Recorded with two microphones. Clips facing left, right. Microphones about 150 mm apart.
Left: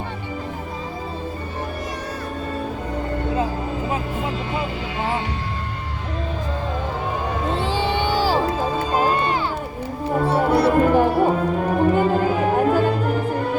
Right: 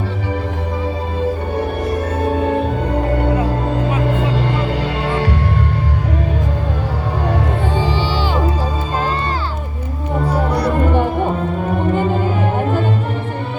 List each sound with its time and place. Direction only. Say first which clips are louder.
2.2 s music: right 11 dB; 75° right (ahead or behind)
7.8 s music: right 2 dB; 65° left (ahead or behind)
8.2 s music: left 2 dB; 35° left (ahead or behind)
10.3 s music: left 2 dB; 5° left (ahead or behind)